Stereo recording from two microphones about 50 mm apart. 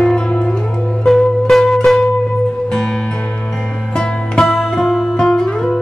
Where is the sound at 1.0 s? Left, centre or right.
Centre.